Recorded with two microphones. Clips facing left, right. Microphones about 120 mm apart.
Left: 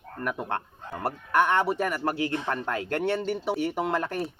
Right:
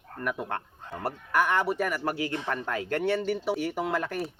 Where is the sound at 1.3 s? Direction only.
5° right (ahead or behind).